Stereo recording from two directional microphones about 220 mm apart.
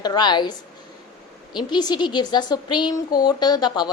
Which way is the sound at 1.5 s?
20° left (ahead or behind).